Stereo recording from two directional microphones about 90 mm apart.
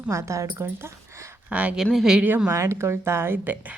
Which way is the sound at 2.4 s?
35° right (ahead or behind).